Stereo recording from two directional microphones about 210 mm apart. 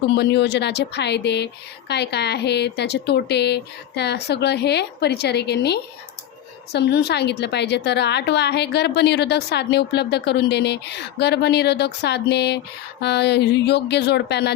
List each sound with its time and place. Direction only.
0.2 s a woman's voice: 55° left (ahead or behind)